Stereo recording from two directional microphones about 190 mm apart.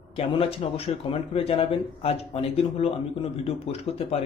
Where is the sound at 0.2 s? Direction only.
30° left (ahead or behind).